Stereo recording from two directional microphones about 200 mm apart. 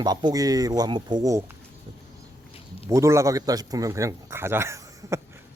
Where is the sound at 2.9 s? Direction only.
15° right (ahead or behind).